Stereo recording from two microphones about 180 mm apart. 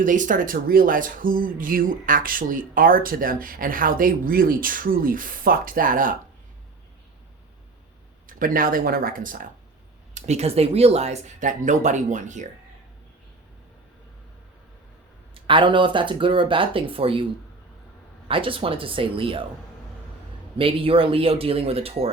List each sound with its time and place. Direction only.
0.0 s speech: 45° right (ahead or behind)
8.3 s speech: 50° right (ahead or behind)
10.2 s speech: 35° right (ahead or behind)
15.4 s speech: 30° right (ahead or behind)
18.3 s speech: 30° right (ahead or behind)
20.6 s speech: 30° right (ahead or behind)